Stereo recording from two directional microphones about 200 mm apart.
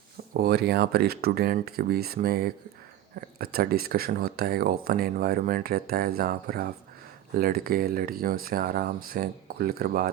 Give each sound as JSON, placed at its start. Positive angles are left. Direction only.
{"t": 0.3, "sound": "speech", "side_deg": -50}